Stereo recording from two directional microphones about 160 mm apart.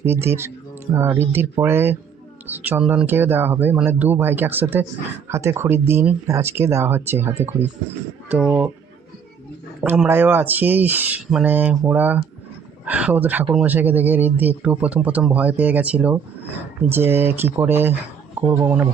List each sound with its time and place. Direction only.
0.0 s speech: 15° right (ahead or behind)
10.1 s speech: 15° right (ahead or behind)